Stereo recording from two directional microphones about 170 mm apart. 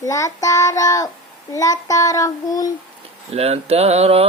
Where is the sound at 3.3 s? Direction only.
35° right (ahead or behind).